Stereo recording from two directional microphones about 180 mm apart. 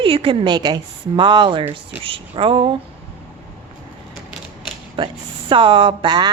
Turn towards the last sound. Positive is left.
turn(degrees=-25)  # may be behind; listen again after turning